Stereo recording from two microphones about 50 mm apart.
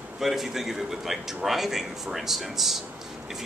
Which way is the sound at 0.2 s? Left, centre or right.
Centre.